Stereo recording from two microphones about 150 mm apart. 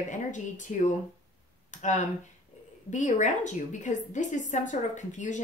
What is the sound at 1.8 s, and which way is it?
A woman's voice, 50° left (ahead or behind).